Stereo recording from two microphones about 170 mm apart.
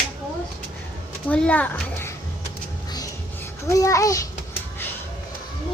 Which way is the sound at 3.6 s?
20° left (ahead or behind).